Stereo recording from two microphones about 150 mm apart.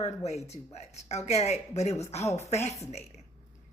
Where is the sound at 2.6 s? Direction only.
20° left (ahead or behind).